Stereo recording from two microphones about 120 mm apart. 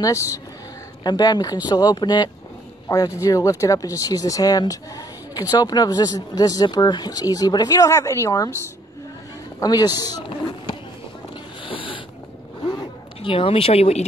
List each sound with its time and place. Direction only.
1.0 s speech: 35° left (ahead or behind)
9.6 s speech: 35° left (ahead or behind)
11.6 s a sound: 45° left (ahead or behind)
12.6 s zipper: 45° left (ahead or behind)